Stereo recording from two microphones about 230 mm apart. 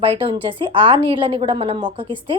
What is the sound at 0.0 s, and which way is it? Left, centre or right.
A woman's voice, right.